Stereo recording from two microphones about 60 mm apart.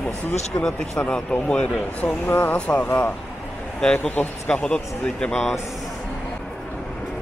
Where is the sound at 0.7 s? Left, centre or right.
Centre.